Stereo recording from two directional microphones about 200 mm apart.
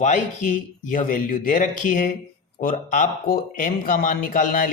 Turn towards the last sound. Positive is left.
turn(degrees=45)  # may be behind; listen again after turning